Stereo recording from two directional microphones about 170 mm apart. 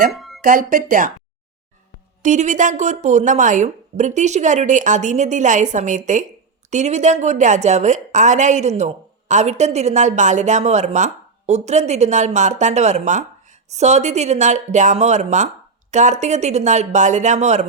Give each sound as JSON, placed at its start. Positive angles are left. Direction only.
{"t": 0.2, "sound": "music", "side_deg": 0}
{"t": 0.4, "sound": "a woman's voice", "side_deg": -55}
{"t": 2.2, "sound": "a woman's voice", "side_deg": -45}